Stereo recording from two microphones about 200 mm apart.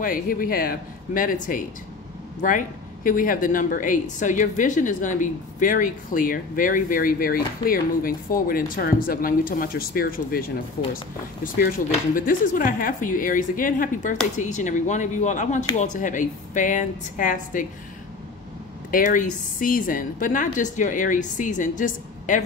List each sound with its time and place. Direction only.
0.0 s a woman's voice: 45° left (ahead or behind)
18.9 s a woman's voice: 45° left (ahead or behind)